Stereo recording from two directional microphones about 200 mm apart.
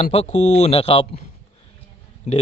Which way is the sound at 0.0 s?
30° left (ahead or behind).